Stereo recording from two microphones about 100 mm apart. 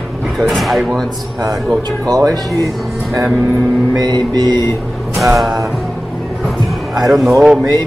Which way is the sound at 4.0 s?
45° right (ahead or behind).